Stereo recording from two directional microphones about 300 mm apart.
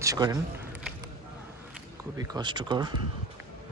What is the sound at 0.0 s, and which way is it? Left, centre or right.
Speech, centre.